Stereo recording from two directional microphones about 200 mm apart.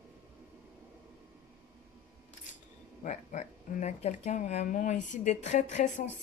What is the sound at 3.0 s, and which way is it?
Speech, 35° left (ahead or behind).